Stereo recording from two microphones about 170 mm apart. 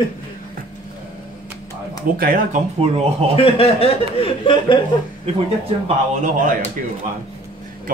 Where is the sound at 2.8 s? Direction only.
35° right (ahead or behind).